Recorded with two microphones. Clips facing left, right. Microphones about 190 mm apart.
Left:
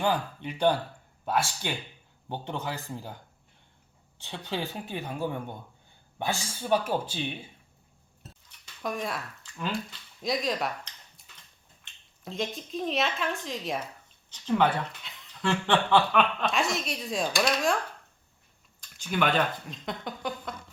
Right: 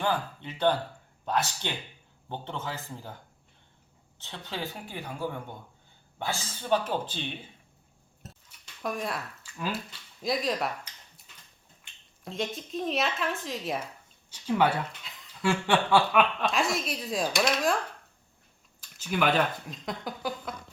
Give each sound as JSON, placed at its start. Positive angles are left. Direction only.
{"t": 0.0, "sound": "speech", "side_deg": 15}
{"t": 4.2, "sound": "speech", "side_deg": 15}
{"t": 8.8, "sound": "speech", "side_deg": 0}
{"t": 18.8, "sound": "speech", "side_deg": -5}